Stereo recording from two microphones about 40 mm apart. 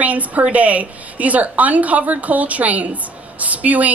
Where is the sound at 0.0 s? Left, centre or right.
Right.